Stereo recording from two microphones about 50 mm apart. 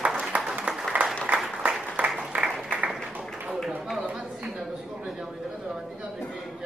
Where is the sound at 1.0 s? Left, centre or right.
Right.